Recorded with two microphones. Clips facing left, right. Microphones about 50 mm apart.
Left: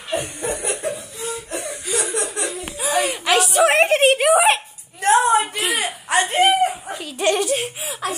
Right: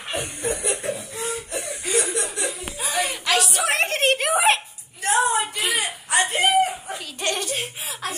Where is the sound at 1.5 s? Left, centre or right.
Left.